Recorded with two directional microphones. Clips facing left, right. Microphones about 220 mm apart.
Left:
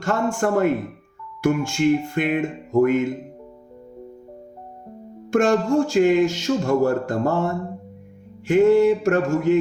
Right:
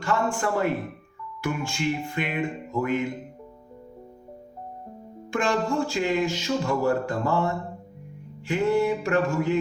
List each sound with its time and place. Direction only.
0.0 s speech: 45° left (ahead or behind)
5.3 s speech: 45° left (ahead or behind)